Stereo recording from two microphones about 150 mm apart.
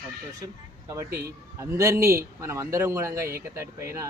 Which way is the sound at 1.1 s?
20° right (ahead or behind).